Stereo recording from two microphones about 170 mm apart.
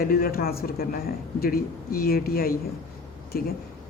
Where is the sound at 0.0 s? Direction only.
60° left (ahead or behind).